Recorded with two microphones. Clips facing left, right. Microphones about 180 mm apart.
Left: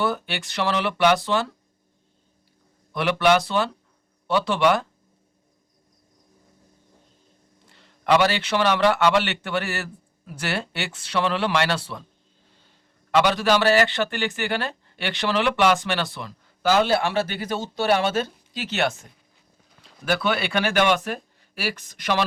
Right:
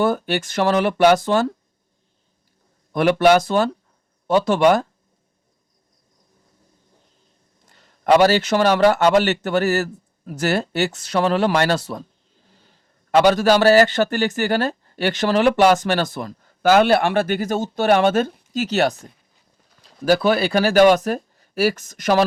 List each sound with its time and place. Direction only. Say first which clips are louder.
0.0 s a man's voice: right 6 dB; 45° right (ahead or behind)
2.9 s a man's voice: right 5 dB; 45° right (ahead or behind)
7.7 s a man's voice: right 5 dB; 45° right (ahead or behind)
13.1 s a man's voice: right 5 dB; 45° right (ahead or behind)